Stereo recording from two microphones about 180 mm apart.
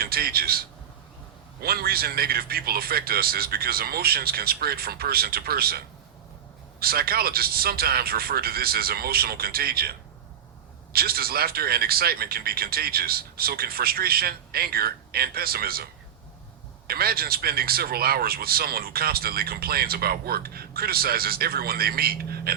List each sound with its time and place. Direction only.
0.0 s a man's voice: 60° right (ahead or behind)
1.6 s speech: 55° right (ahead or behind)
10.9 s speech: 55° right (ahead or behind)